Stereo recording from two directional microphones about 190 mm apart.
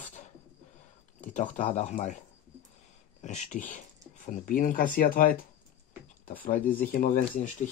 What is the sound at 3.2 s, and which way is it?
Speech, 40° left (ahead or behind).